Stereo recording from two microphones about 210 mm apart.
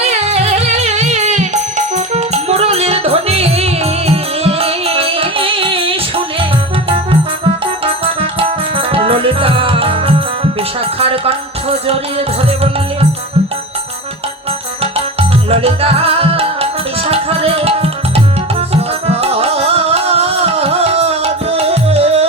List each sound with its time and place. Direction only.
0.0 s music: 30° right (ahead or behind)
15.4 s music: 30° right (ahead or behind)